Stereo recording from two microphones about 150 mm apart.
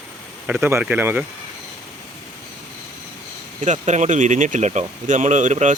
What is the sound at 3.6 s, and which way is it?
Speech, 50° right (ahead or behind).